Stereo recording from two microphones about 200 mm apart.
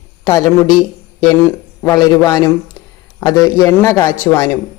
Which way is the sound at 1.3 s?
15° left (ahead or behind).